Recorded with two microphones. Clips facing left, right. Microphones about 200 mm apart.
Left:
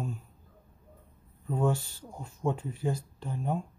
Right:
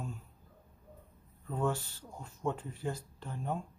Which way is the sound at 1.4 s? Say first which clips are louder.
Left 5 dB; 10° left (ahead or behind).